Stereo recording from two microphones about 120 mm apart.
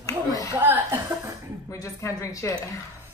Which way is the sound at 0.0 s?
30° left (ahead or behind).